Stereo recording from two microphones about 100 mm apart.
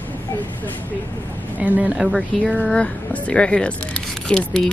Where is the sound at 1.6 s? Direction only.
15° right (ahead or behind).